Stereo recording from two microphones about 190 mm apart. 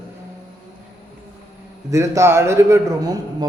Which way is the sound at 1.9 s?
15° right (ahead or behind).